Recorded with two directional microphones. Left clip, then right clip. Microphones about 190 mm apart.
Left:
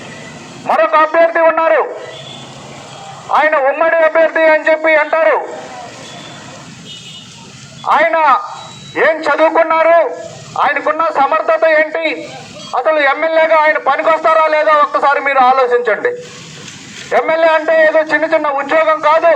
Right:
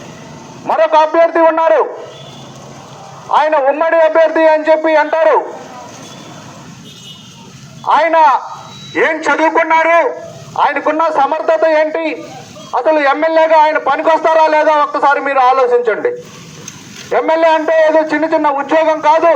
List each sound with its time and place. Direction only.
0.7 s a man's voice: 25° right (ahead or behind)
3.2 s a man's voice: 25° right (ahead or behind)
7.9 s a man's voice: 25° right (ahead or behind)
9.0 s speech: 15° right (ahead or behind)
10.6 s a man's voice: 20° right (ahead or behind)